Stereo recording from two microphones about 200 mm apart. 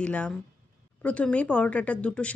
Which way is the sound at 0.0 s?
5° left (ahead or behind).